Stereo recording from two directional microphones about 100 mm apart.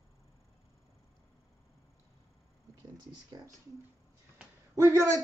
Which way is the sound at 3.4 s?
45° right (ahead or behind).